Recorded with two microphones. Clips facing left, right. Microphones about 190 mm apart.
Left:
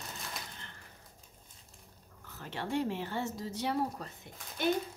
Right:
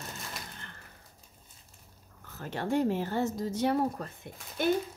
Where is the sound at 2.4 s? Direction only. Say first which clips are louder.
Right 5 dB; 45° right (ahead or behind).